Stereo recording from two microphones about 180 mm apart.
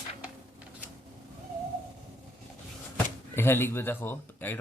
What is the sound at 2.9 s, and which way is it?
Speech, 10° left (ahead or behind).